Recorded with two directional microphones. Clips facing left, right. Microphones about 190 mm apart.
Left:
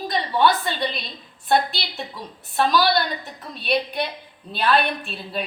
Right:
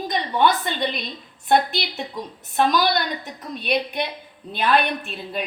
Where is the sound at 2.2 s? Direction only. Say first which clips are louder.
Right 1 dB; 20° right (ahead or behind).